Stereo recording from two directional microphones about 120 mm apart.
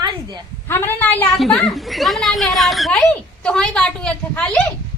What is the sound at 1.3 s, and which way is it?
A woman's voice, centre (ahead or behind).